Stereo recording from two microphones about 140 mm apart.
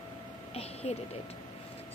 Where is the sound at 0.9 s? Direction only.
45° left (ahead or behind).